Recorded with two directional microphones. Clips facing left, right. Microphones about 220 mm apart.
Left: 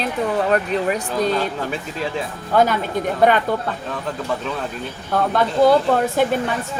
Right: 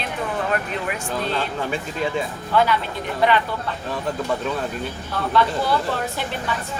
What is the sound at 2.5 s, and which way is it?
Speech, 45° left (ahead or behind).